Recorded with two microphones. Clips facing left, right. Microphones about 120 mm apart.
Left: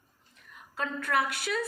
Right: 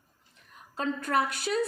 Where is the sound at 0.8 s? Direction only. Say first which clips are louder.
Right 2 dB; 25° right (ahead or behind).